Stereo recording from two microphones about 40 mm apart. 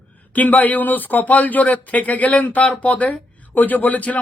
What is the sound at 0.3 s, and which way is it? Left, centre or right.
Speech, left.